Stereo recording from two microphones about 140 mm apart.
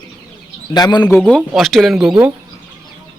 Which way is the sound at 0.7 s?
30° left (ahead or behind).